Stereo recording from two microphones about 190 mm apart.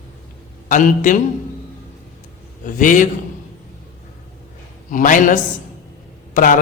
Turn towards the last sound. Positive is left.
turn(degrees=45)  # may be behind; listen again after turning